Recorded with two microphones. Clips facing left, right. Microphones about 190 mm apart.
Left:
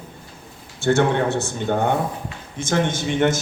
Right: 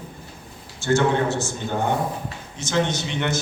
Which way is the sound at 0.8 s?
60° left (ahead or behind).